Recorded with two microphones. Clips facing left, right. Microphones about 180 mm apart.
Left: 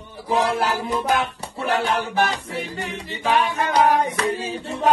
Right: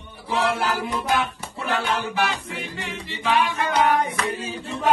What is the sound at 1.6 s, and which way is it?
Music, 40° left (ahead or behind).